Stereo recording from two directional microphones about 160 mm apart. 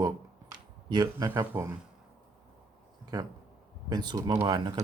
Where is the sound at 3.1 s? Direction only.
25° right (ahead or behind).